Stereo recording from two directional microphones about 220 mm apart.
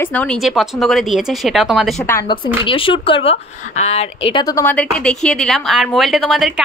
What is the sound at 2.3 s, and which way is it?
A woman's voice, 20° left (ahead or behind).